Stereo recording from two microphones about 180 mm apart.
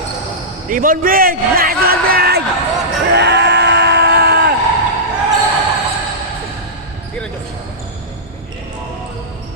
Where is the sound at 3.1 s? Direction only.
70° right (ahead or behind).